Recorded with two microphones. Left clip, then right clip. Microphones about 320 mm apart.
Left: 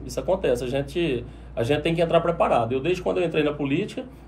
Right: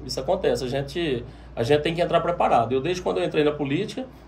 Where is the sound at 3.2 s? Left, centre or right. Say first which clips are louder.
Right 1 dB; centre.